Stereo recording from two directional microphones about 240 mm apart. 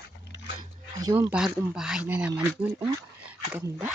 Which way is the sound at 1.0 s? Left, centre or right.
Centre.